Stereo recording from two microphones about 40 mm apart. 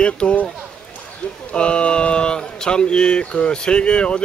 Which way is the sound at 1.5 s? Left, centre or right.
Left.